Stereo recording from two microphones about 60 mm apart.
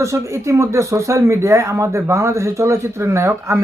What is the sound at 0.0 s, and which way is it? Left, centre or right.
Speech, right.